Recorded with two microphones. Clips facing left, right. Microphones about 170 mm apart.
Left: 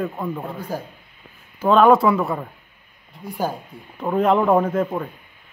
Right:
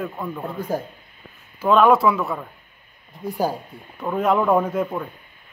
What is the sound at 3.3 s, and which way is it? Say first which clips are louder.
Speech: right 2 dB; 15° right (ahead or behind).